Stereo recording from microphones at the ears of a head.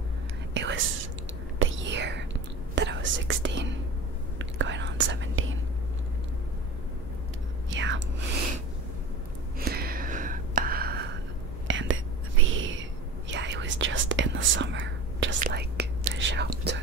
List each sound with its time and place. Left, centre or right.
0.6 s whispering: right
7.7 s whispering: right
9.7 s a sound: right
11.6 s whispering: right